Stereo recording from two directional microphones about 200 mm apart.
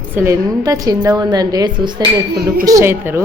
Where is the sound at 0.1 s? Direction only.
10° right (ahead or behind).